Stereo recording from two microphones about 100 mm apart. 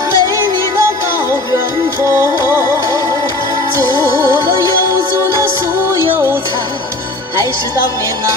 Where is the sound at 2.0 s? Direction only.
30° right (ahead or behind).